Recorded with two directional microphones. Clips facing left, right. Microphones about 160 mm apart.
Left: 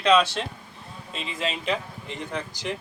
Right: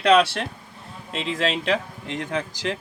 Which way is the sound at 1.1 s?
85° right.